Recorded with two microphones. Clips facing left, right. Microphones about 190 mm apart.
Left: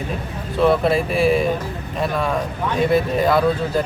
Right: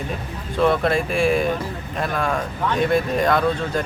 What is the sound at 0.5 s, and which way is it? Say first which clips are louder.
Speech: left 2 dB; centre (ahead or behind).